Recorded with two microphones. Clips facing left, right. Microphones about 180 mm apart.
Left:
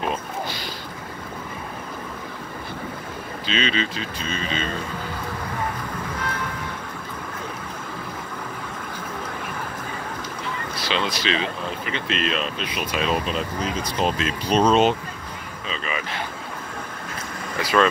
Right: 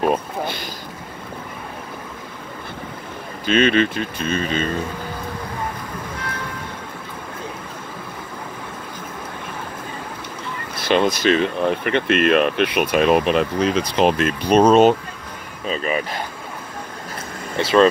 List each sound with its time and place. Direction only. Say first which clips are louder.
0.0 s speech: right 7 dB; 55° right (ahead or behind)
3.4 s speech: right 9 dB; 55° right (ahead or behind)
10.8 s speech: right 9 dB; 50° right (ahead or behind)
17.6 s speech: right 5 dB; 25° right (ahead or behind)